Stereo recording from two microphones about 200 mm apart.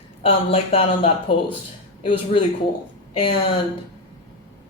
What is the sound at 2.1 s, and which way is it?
Speech, 30° left (ahead or behind).